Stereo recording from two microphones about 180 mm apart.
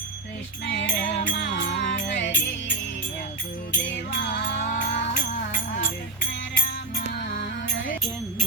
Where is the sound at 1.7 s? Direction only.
85° left.